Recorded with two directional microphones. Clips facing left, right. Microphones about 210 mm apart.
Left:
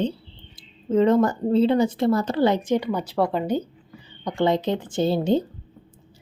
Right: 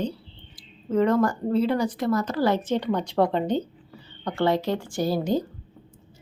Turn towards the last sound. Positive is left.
turn(degrees=25)  # may be behind; listen again after turning